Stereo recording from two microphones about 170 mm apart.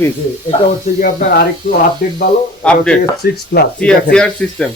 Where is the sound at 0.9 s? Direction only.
55° left (ahead or behind).